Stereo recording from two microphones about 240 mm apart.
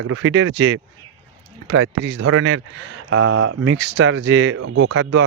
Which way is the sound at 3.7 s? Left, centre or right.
Right.